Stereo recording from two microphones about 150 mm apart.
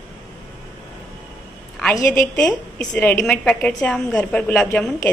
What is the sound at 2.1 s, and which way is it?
A woman's voice, 5° left (ahead or behind).